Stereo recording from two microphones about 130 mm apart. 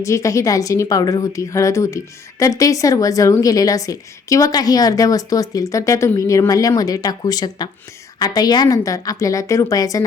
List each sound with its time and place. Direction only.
0.0 s a woman's voice: 25° left (ahead or behind)